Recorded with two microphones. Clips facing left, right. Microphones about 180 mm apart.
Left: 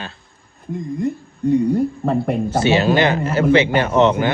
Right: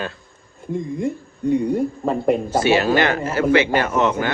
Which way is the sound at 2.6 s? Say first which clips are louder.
Left 2 dB; 25° left (ahead or behind).